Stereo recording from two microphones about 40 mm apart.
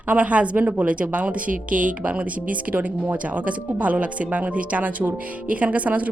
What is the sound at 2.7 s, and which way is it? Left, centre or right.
Speech, right.